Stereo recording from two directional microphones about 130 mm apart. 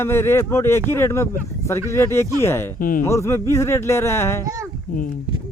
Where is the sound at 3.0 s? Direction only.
20° left (ahead or behind).